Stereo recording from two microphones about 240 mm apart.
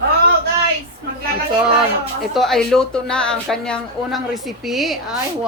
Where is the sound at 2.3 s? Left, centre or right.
Centre.